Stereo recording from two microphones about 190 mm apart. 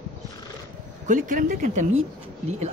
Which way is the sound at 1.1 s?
45° right (ahead or behind).